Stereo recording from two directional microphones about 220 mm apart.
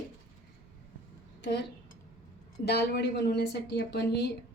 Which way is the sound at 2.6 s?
50° left (ahead or behind).